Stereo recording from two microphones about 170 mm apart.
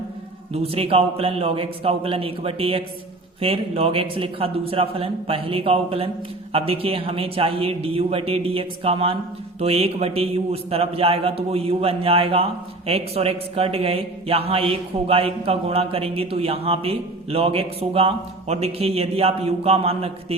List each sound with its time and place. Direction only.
0.5 s a man's voice: 35° right (ahead or behind)